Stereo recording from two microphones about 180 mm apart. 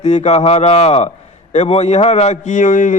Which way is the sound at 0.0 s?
40° left (ahead or behind).